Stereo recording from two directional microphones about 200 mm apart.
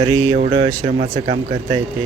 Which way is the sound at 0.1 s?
90° right.